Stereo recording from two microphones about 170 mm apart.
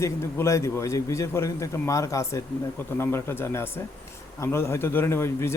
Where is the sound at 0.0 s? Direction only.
15° left (ahead or behind).